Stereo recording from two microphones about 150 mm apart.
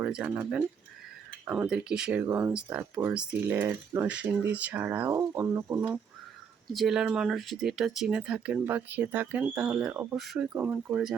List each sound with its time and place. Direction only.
0.0 s speech: 5° right (ahead or behind)
6.7 s speech: 5° right (ahead or behind)
10.2 s speech: centre (ahead or behind)